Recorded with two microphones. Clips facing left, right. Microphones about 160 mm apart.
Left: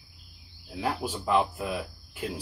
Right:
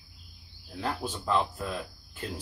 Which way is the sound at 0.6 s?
10° left (ahead or behind).